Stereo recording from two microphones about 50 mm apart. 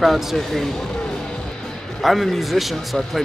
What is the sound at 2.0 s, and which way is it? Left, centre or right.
Speech, centre.